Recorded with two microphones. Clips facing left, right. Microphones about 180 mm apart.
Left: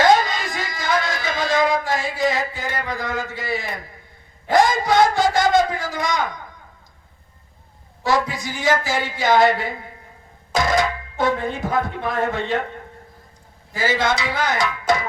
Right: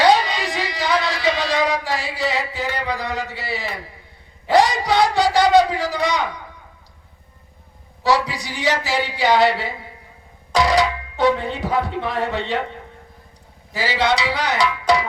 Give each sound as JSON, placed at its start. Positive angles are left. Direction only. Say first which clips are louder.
{"t": 0.0, "sound": "a sound", "louder": "even", "side_deg": 45}
{"t": 4.5, "sound": "a man's voice", "louder": "even", "side_deg": 45}
{"t": 8.1, "sound": "a man's voice", "louder": "even", "side_deg": 50}
{"t": 13.7, "sound": "a man's voice", "louder": "right 1 dB", "side_deg": 45}